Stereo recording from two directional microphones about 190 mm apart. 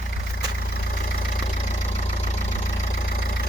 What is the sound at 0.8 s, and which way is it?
Vehicle, 45° left (ahead or behind).